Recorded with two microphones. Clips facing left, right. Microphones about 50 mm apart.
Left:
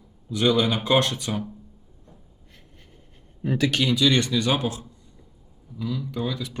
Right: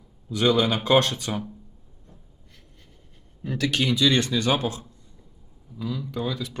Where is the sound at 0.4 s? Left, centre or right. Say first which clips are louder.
Even; centre.